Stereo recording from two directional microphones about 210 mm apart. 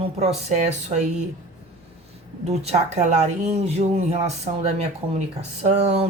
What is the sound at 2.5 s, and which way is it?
Speech, 30° right (ahead or behind).